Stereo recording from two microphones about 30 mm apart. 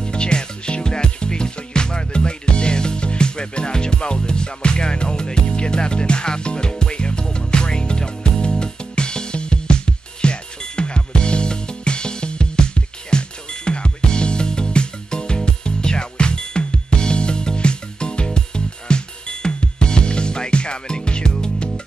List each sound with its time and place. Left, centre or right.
0.0 s music: left